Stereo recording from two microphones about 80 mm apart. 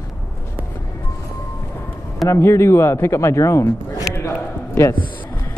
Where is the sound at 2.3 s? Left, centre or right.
Left.